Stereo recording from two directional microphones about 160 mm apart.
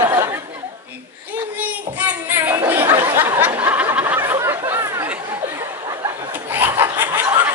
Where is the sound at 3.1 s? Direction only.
15° right (ahead or behind).